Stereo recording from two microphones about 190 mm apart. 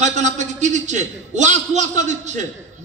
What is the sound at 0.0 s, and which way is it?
A man's voice, 40° right (ahead or behind).